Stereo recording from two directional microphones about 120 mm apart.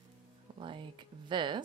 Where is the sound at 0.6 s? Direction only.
45° right (ahead or behind).